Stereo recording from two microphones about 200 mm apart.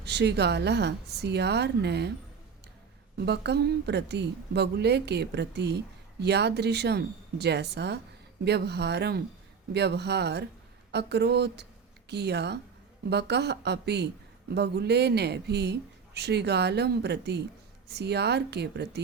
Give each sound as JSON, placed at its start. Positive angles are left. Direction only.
{"t": 0.0, "sound": "a woman's voice", "side_deg": -55}
{"t": 3.2, "sound": "a woman's voice", "side_deg": -55}